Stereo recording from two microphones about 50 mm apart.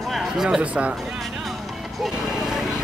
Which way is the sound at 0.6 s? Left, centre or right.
Right.